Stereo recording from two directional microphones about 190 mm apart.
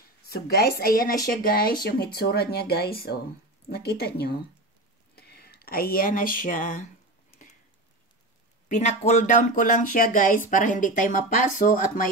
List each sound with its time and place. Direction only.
0.3 s speech: 55° left (ahead or behind)
8.6 s speech: 40° left (ahead or behind)